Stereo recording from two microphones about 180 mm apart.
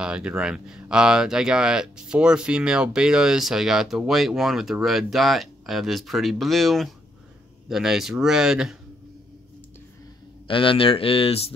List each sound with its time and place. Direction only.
0.0 s speech: 5° right (ahead or behind)
10.5 s speech: 30° left (ahead or behind)